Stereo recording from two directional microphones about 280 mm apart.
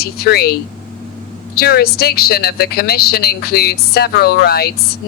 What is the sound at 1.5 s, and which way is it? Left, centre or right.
A woman's voice, left.